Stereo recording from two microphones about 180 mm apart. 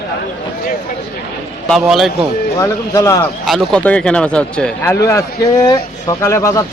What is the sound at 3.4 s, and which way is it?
Speech, centre (ahead or behind).